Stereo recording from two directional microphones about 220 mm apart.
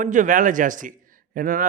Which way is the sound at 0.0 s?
35° right (ahead or behind).